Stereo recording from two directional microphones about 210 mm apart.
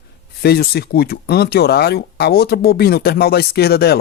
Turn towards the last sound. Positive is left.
turn(degrees=50)  # may be behind; listen again after turning